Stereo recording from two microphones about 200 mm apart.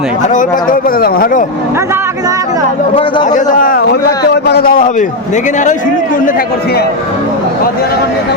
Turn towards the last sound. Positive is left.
turn(degrees=50)  # may be behind; listen again after turning